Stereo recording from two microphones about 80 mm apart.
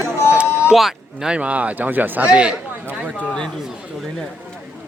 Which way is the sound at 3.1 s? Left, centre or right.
Centre.